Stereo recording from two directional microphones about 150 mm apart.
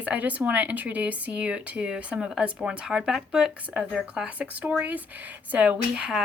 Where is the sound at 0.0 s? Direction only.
10° right (ahead or behind).